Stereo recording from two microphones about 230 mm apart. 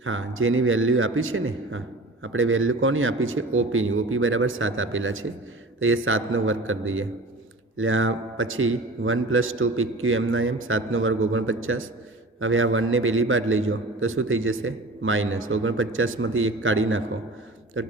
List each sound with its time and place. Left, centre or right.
0.0 s a man's voice: right